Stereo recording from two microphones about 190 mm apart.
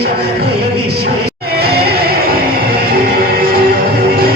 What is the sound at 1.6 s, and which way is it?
Music, 55° right (ahead or behind).